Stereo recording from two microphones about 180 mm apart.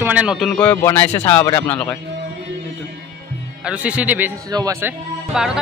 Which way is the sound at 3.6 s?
5° right (ahead or behind).